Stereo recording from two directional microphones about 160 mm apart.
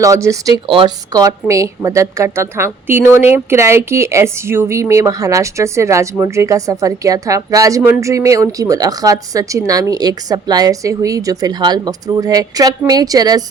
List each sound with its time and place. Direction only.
0.0 s speech: 20° right (ahead or behind)